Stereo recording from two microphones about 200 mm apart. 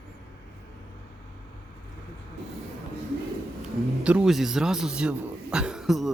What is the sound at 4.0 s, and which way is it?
A man's voice, 5° right (ahead or behind).